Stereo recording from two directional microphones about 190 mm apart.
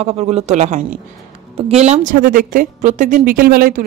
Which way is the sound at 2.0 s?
45° right (ahead or behind).